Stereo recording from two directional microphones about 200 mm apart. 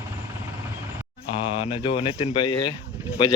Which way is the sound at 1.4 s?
25° left (ahead or behind).